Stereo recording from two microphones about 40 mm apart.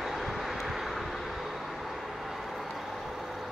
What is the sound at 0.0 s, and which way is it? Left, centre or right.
Vehicle, centre.